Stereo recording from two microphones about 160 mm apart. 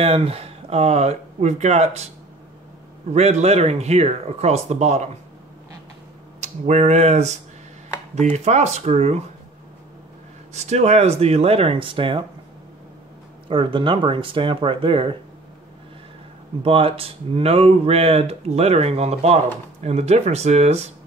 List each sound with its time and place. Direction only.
0.0 s speech: 40° right (ahead or behind)
3.1 s speech: 45° right (ahead or behind)
6.4 s speech: 45° right (ahead or behind)
10.5 s speech: 45° right (ahead or behind)
13.5 s speech: 30° right (ahead or behind)
16.6 s speech: 35° right (ahead or behind)